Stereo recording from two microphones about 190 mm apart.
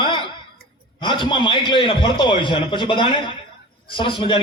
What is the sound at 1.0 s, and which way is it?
A man's voice, 25° left (ahead or behind).